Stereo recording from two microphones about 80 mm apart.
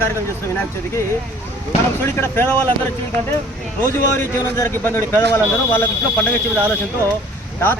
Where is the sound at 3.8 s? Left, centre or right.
Left.